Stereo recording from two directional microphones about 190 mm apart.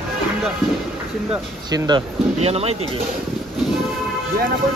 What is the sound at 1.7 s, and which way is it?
Speech, 25° right (ahead or behind).